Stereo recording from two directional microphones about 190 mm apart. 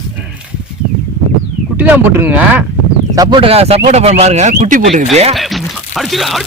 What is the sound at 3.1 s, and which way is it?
Speech, 25° right (ahead or behind).